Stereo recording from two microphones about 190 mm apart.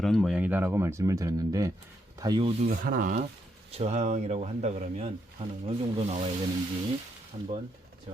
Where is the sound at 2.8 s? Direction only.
45° right (ahead or behind); by 6.1 s 30° right (ahead or behind).